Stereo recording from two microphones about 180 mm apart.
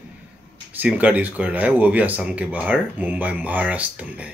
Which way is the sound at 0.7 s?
10° right (ahead or behind).